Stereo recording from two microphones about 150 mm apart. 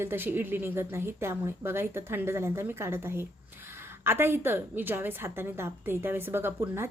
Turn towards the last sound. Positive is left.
turn(degrees=-15)  # may be behind; listen again after turning